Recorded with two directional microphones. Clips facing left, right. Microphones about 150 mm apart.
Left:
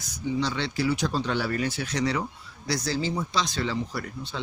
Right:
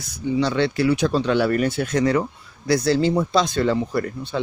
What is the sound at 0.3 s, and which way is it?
Speech, 60° right (ahead or behind).